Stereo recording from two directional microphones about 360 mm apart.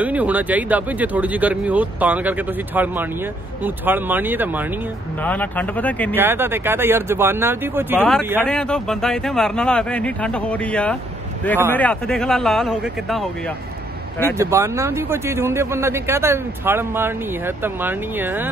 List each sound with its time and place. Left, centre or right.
0.0 s speech: centre
6.2 s speech: centre
14.4 s speech: centre